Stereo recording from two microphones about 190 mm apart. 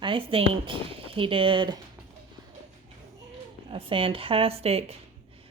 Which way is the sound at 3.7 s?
30° right (ahead or behind).